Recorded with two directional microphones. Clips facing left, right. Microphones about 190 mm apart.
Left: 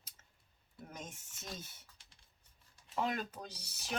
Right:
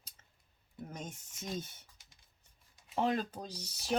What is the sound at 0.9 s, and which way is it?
Speech, 30° right (ahead or behind).